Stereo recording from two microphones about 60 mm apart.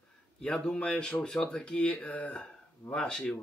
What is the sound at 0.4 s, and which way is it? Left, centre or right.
Speech, centre.